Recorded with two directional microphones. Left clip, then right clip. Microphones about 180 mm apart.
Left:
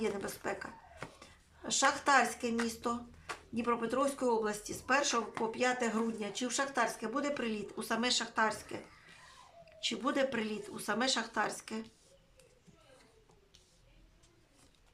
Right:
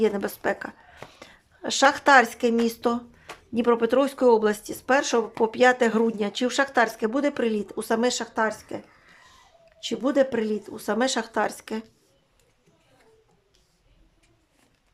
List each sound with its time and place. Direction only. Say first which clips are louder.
0.0 s a woman's voice: right 13 dB; 50° right (ahead or behind)
9.8 s speech: right 10 dB; 35° right (ahead or behind)